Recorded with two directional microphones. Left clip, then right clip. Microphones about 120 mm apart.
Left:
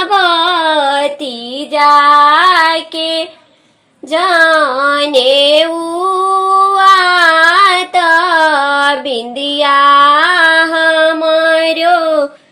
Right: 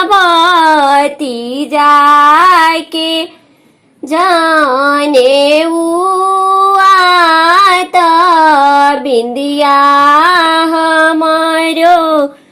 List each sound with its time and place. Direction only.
0.2 s child singing: 35° right (ahead or behind)
1.7 s music: 30° right (ahead or behind)
2.9 s female singing: 25° right (ahead or behind)
5.5 s a sound: 25° right (ahead or behind)
9.3 s female singing: 25° right (ahead or behind)